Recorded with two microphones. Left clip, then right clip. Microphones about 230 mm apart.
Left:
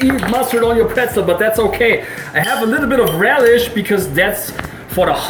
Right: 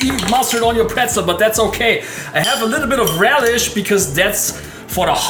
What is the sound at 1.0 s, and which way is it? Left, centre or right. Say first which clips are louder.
Speech: left 1 dB; right.